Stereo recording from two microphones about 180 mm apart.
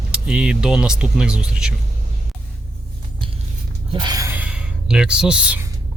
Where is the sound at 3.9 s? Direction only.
25° right (ahead or behind); by 5.6 s 5° right (ahead or behind).